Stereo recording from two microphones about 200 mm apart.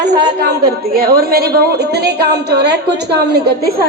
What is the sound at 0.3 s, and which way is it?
A woman's voice, 50° right (ahead or behind).